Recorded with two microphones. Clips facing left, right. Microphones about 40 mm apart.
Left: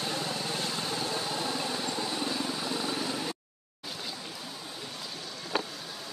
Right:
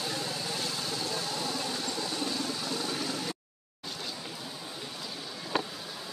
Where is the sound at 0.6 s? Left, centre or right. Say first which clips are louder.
Left 2 dB; left.